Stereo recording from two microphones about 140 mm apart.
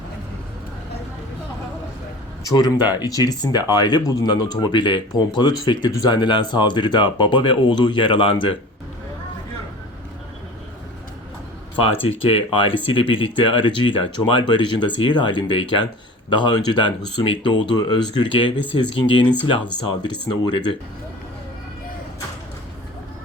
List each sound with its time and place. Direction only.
2.6 s speech: 30° left (ahead or behind)
12.0 s speech: 40° left (ahead or behind)